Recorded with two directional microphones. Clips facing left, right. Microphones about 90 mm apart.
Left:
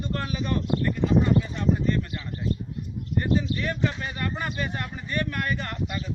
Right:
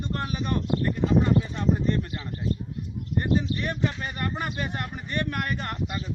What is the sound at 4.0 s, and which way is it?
Speech, 40° right (ahead or behind).